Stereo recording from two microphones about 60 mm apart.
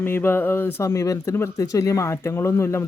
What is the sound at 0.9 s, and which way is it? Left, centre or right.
Speech, left.